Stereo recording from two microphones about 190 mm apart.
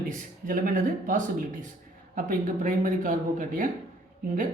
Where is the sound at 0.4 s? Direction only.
45° right (ahead or behind).